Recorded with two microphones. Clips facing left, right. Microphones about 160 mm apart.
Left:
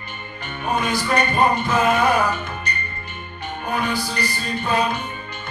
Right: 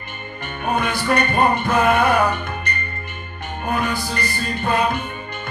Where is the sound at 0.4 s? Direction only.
55° right (ahead or behind).